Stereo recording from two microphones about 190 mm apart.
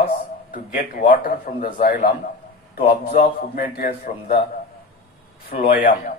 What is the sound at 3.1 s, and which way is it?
A man's voice, 45° left (ahead or behind).